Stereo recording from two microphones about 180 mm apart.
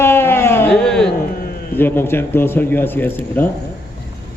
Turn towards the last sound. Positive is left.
turn(degrees=10)  # may be behind; listen again after turning